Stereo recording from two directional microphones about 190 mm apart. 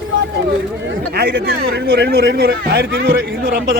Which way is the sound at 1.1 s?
55° right (ahead or behind).